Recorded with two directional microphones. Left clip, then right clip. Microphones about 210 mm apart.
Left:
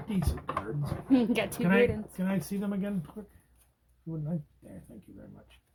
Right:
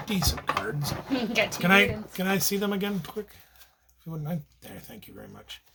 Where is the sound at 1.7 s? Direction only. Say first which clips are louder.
Right 4 dB; 55° right (ahead or behind).